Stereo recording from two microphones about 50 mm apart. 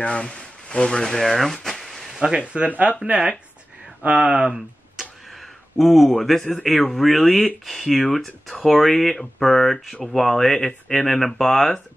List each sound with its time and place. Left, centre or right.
0.0 s speech: left; by 2.0 s centre
2.0 s a sound: centre
2.4 s speech: right
4.4 s speech: centre